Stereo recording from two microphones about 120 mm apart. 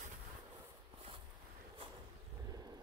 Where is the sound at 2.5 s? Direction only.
35° right (ahead or behind).